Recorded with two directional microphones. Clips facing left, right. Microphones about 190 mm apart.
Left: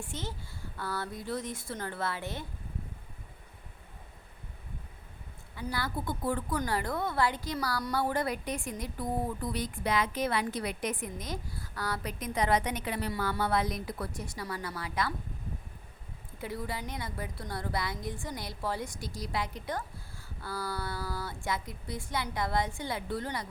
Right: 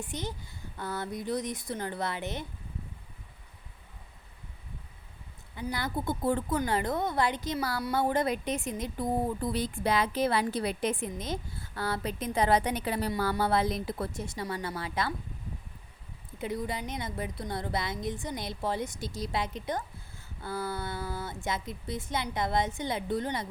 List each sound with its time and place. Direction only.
0.0 s speech: 15° right (ahead or behind)
5.5 s a woman's voice: 20° right (ahead or behind)
16.4 s a woman's voice: 20° right (ahead or behind)